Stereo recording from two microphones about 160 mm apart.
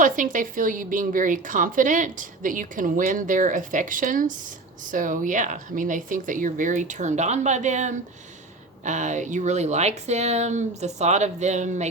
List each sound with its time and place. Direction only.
0.0 s a woman's voice: 55° right (ahead or behind)